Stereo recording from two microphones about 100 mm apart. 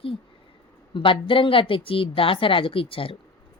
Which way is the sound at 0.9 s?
60° left (ahead or behind).